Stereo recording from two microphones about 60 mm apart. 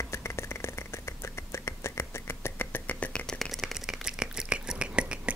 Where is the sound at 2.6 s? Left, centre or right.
Left.